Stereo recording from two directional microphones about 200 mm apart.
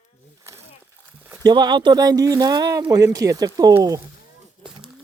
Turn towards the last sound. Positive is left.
turn(degrees=-15)  # may be behind; listen again after turning